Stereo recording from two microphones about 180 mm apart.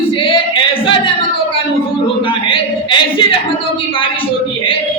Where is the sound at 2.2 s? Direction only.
30° left (ahead or behind).